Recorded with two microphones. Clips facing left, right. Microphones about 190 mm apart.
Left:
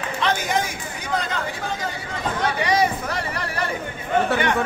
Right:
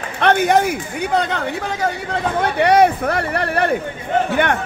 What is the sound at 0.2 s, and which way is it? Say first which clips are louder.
Speech: right 9 dB; 60° right (ahead or behind).